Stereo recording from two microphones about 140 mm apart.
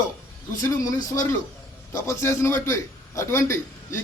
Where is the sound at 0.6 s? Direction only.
25° left (ahead or behind).